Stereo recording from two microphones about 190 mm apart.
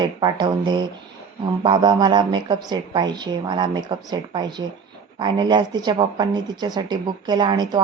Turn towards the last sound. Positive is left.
turn(degrees=-25)  # may be behind; listen again after turning